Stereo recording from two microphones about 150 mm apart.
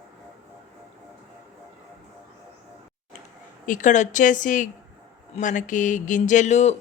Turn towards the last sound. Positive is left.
turn(degrees=50)  # may be behind; listen again after turning